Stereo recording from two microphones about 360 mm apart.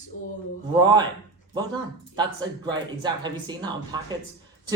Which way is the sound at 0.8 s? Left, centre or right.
Centre.